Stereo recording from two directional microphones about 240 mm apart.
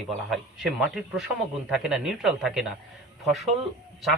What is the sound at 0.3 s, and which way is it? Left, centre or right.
Speech, centre.